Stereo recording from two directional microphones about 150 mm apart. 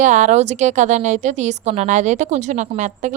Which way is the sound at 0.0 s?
55° right (ahead or behind).